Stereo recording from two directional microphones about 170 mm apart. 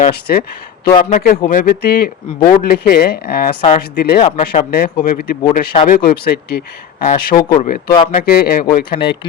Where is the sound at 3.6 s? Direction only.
40° left (ahead or behind).